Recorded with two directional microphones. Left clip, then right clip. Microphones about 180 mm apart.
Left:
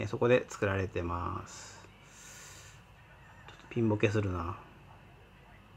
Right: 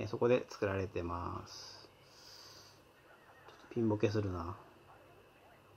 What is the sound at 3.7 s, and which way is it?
Speech, 5° left (ahead or behind).